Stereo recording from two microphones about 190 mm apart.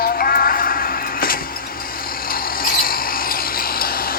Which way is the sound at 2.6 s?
50° left (ahead or behind).